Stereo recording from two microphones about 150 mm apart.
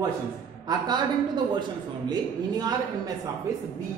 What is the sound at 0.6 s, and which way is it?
A man's voice, 30° right (ahead or behind).